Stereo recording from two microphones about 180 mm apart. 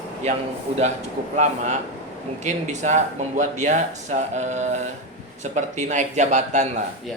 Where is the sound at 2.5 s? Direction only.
40° right (ahead or behind).